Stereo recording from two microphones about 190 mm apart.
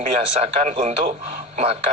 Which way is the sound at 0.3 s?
35° right (ahead or behind).